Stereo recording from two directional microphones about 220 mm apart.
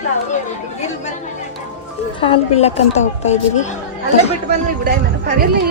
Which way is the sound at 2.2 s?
25° left (ahead or behind).